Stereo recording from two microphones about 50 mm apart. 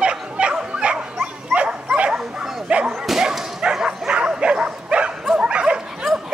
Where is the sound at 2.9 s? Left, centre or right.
Centre.